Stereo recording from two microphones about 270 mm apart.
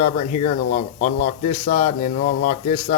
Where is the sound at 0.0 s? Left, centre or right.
Left.